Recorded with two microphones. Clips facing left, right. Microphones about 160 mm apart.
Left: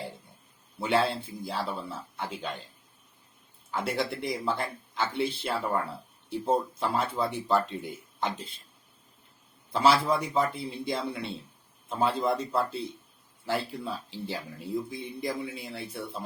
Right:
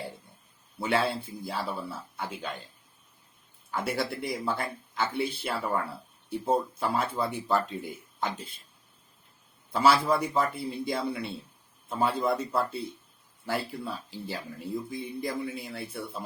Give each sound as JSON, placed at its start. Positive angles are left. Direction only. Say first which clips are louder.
{"t": 0.8, "sound": "speech", "louder": "left 1 dB", "side_deg": 0}
{"t": 3.7, "sound": "speech", "louder": "even", "side_deg": 0}
{"t": 9.7, "sound": "speech", "louder": "even", "side_deg": 0}